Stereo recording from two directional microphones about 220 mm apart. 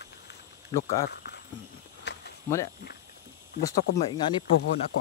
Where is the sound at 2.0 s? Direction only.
50° left (ahead or behind).